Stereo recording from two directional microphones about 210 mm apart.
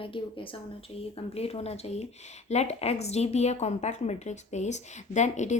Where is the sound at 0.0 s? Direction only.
25° left (ahead or behind).